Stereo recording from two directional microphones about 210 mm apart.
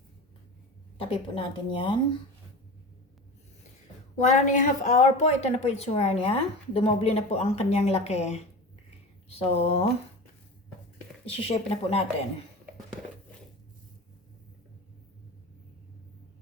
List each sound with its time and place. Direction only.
0.9 s a woman's voice: 25° left (ahead or behind)
4.2 s a woman's voice: 35° left (ahead or behind)
11.3 s a woman's voice: 30° left (ahead or behind)